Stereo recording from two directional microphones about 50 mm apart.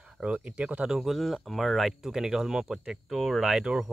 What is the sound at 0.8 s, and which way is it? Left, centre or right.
Speech, centre.